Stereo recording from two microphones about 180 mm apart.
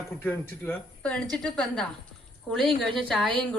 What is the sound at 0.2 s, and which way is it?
Speech, 10° left (ahead or behind).